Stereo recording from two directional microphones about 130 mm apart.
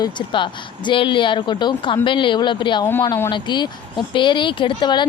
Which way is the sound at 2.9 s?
15° left (ahead or behind).